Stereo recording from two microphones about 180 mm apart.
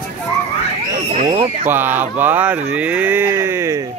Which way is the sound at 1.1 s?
40° right (ahead or behind).